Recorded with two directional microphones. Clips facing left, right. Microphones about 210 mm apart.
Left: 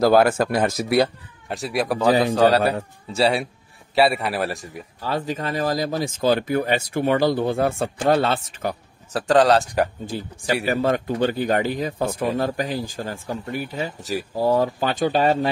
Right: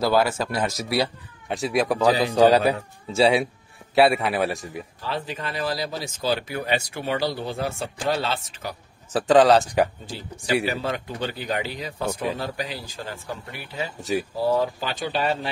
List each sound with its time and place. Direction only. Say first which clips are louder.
0.0 s speech: left 5 dB; 50° left (ahead or behind)
1.5 s a man's voice: right 1 dB; centre (ahead or behind)
5.0 s speech: left 6 dB; 45° left (ahead or behind)
9.1 s a man's voice: right 1 dB; centre (ahead or behind)
10.1 s speech: even; 50° left (ahead or behind)